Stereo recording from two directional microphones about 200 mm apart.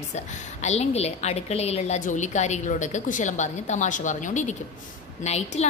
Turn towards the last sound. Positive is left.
turn(degrees=35)  # may be behind; listen again after turning